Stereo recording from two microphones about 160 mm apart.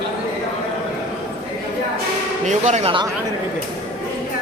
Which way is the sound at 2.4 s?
50° right (ahead or behind).